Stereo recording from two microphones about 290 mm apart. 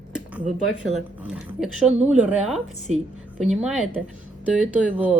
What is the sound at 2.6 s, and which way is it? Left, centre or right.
Speech, right.